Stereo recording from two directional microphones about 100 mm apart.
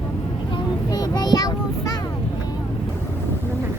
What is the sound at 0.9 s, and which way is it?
Child singing, 40° left (ahead or behind).